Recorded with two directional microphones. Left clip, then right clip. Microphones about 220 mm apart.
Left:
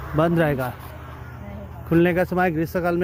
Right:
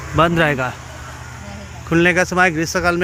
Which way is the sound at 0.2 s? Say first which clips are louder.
Right 5 dB; 5° left (ahead or behind).